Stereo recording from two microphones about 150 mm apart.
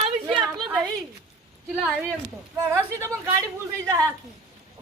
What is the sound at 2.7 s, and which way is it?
Speech, 20° right (ahead or behind).